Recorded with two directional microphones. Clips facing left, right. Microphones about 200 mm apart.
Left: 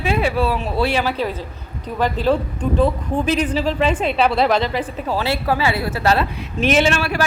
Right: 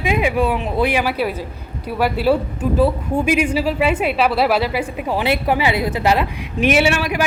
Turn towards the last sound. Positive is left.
turn(degrees=-15)  # may be behind; listen again after turning